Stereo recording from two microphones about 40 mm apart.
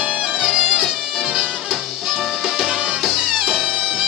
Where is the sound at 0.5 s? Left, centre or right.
Centre.